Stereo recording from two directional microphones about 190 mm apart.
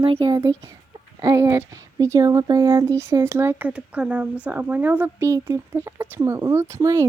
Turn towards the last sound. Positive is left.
turn(degrees=-15)  # may be behind; listen again after turning